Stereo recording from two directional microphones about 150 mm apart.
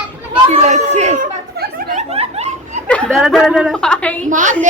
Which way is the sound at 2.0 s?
45° right (ahead or behind).